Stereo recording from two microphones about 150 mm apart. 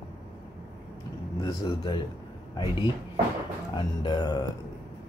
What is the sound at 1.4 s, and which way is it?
Speech, 25° left (ahead or behind).